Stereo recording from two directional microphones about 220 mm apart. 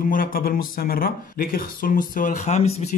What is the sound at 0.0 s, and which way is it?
A man's voice, 40° left (ahead or behind).